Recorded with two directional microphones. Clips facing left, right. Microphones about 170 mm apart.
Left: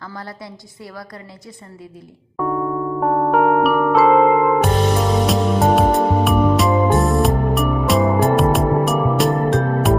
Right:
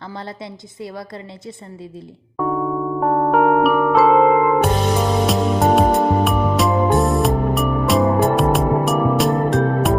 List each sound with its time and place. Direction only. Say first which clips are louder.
0.1 s a woman's voice: right 4 dB; 25° right (ahead or behind)
2.4 s electric piano: even; centre (ahead or behind)